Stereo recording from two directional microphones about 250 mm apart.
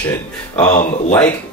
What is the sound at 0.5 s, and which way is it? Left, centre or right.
Speech, left.